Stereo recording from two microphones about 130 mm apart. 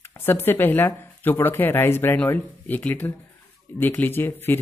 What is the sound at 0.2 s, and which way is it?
Speech, 15° left (ahead or behind).